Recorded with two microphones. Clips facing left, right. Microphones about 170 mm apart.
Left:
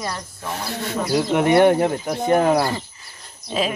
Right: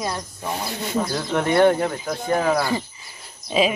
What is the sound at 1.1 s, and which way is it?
Speech, 15° left (ahead or behind).